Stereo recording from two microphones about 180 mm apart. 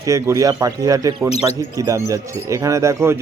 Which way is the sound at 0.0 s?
15° right (ahead or behind).